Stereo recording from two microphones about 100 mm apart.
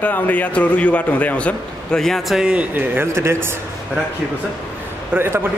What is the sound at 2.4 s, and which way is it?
A man's voice, 10° right (ahead or behind).